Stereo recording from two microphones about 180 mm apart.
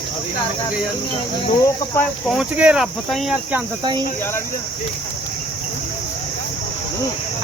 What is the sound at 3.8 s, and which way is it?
Speech, 25° right (ahead or behind).